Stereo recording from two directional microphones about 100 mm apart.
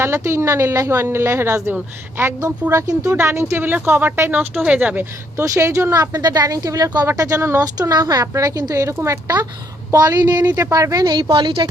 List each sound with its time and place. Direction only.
0.0 s speech: 25° right (ahead or behind)
5.5 s a woman's voice: 30° right (ahead or behind); by 11.7 s 50° right (ahead or behind)